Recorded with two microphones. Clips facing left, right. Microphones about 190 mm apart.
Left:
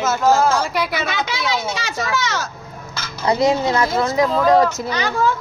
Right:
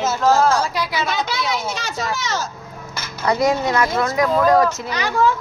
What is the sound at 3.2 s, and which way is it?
Speech, 25° left (ahead or behind).